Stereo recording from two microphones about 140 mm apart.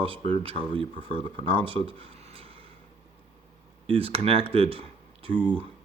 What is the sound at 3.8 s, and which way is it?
Speech, 45° right (ahead or behind).